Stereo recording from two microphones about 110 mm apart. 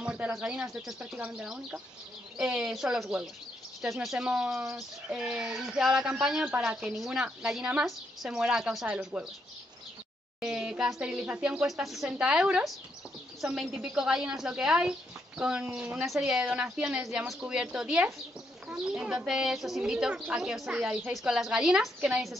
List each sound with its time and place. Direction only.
0.0 s a woman's voice: 10° right (ahead or behind)
10.4 s a woman's voice: 5° right (ahead or behind)